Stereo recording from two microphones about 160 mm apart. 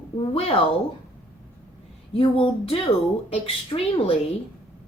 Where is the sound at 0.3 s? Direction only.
35° left (ahead or behind).